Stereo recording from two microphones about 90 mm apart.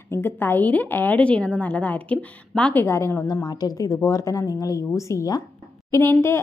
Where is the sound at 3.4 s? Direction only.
45° left (ahead or behind).